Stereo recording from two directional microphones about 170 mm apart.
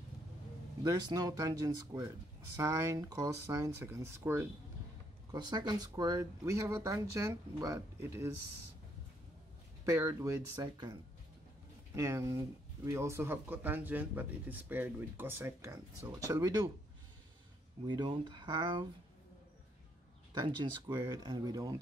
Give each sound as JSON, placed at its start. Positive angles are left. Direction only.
{"t": 0.8, "sound": "speech", "side_deg": -20}
{"t": 9.8, "sound": "speech", "side_deg": -15}
{"t": 17.8, "sound": "speech", "side_deg": -25}
{"t": 20.8, "sound": "speech", "side_deg": -20}